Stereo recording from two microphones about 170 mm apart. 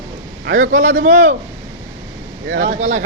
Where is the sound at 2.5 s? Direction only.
75° right (ahead or behind).